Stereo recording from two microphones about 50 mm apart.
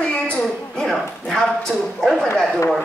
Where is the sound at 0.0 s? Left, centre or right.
Left.